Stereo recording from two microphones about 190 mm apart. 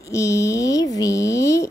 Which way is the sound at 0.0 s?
15° left (ahead or behind).